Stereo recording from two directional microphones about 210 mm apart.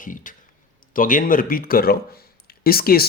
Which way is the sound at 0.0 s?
40° left (ahead or behind).